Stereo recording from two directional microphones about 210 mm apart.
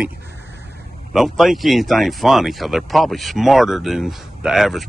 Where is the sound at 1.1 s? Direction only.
Centre (ahead or behind).